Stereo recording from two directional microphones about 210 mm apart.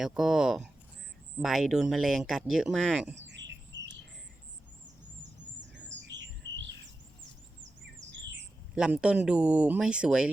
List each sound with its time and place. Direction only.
0.0 s speech: centre (ahead or behind)
3.2 s bird: 55° right (ahead or behind)
5.5 s bird: 55° right (ahead or behind)
8.7 s speech: 5° right (ahead or behind)